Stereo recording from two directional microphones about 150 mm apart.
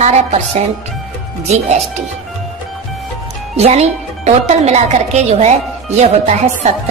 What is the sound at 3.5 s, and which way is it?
Speech, 45° right (ahead or behind).